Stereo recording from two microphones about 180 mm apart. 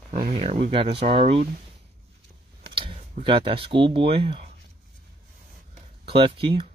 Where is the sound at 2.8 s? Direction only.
35° right (ahead or behind).